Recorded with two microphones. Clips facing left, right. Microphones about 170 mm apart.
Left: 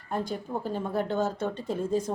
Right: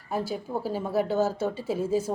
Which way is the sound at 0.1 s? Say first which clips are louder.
Right 1 dB; 5° right (ahead or behind).